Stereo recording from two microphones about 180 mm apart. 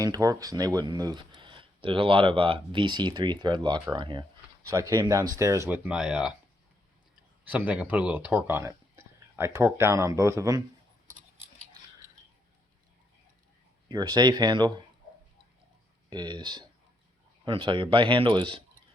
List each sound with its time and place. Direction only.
0.0 s speech: 20° right (ahead or behind)
7.4 s speech: 10° right (ahead or behind)
13.8 s speech: 25° right (ahead or behind)
16.0 s speech: 25° right (ahead or behind)